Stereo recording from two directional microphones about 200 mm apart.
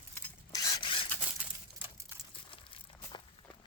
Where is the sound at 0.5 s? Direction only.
25° left (ahead or behind).